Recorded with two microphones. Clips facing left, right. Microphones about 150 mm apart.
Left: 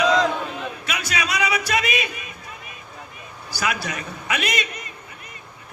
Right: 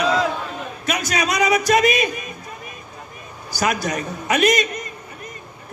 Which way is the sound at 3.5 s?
45° right (ahead or behind).